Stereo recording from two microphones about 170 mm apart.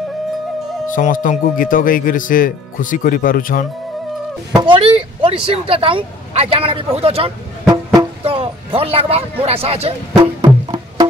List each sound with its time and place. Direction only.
0.9 s speech: 50° left (ahead or behind)
4.6 s speech: 30° right (ahead or behind)
7.7 s music: 30° right (ahead or behind)
10.1 s music: 25° right (ahead or behind)